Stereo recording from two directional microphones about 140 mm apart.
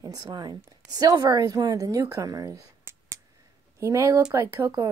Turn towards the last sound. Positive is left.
turn(degrees=-20)  # may be behind; listen again after turning